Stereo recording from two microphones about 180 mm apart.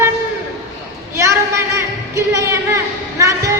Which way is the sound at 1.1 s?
15° right (ahead or behind).